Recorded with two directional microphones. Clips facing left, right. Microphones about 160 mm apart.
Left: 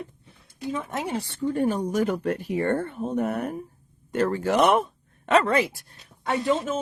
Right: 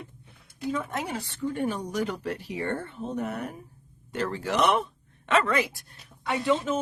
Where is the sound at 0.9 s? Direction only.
25° left (ahead or behind).